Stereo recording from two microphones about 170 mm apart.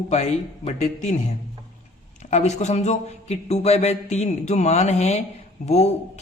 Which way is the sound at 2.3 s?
40° left (ahead or behind).